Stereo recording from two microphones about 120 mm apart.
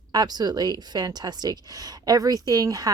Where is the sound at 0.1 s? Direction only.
35° right (ahead or behind).